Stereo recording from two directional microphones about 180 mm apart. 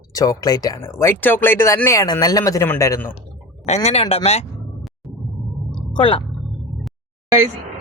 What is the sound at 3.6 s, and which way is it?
Speech, 35° left (ahead or behind).